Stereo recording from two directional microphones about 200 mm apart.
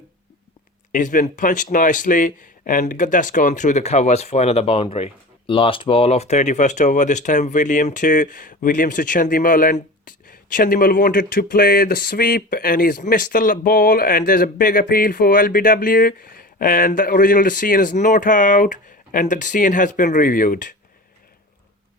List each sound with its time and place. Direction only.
0.9 s speech: 40° left (ahead or behind)